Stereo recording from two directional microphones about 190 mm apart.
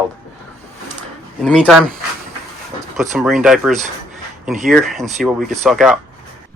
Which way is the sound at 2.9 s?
Centre (ahead or behind).